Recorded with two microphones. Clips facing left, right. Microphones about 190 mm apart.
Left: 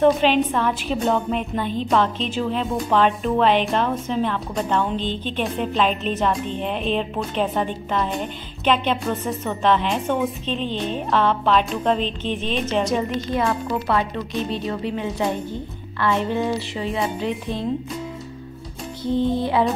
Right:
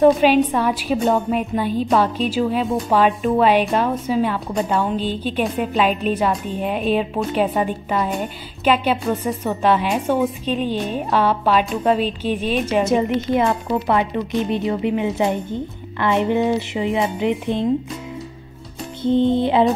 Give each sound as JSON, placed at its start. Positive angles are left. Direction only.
{"t": 0.0, "sound": "a woman's voice", "side_deg": -10}
{"t": 19.0, "sound": "speech", "side_deg": -20}